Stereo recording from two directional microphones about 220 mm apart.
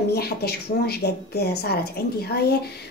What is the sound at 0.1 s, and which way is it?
Speech, 45° left (ahead or behind).